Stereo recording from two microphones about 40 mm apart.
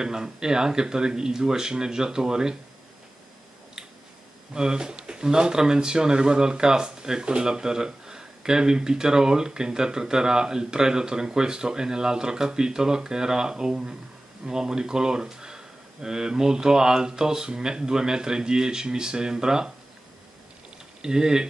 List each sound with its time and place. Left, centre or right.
0.0 s speech: centre
4.6 s speech: centre
21.0 s speech: centre